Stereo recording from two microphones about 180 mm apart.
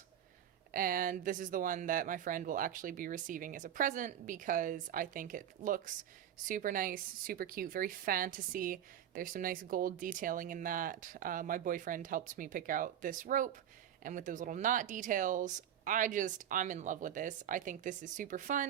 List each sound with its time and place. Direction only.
0.7 s a woman's voice: 50° right (ahead or behind)